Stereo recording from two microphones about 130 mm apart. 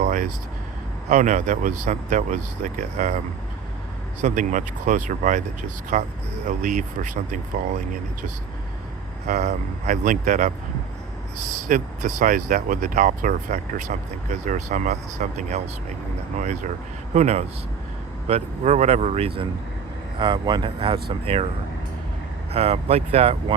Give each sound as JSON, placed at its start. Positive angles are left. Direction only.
{"t": 0.0, "sound": "a sound", "side_deg": -90}
{"t": 1.1, "sound": "speech", "side_deg": -70}
{"t": 4.2, "sound": "speech", "side_deg": -70}
{"t": 5.9, "sound": "speech", "side_deg": -65}
{"t": 9.2, "sound": "speech", "side_deg": -75}
{"t": 11.7, "sound": "speech", "side_deg": -90}
{"t": 16.4, "sound": "speech", "side_deg": -70}
{"t": 17.2, "sound": "speech", "side_deg": -55}
{"t": 20.1, "sound": "speech", "side_deg": -40}
{"t": 22.5, "sound": "speech", "side_deg": -50}